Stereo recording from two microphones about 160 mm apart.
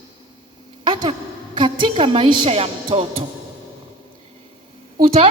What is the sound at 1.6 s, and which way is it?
A woman's voice, 30° right (ahead or behind).